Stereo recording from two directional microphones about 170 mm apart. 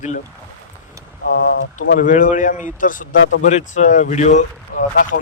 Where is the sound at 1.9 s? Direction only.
50° left (ahead or behind).